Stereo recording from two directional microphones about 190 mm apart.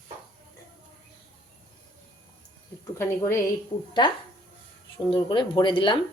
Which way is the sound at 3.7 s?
25° left (ahead or behind).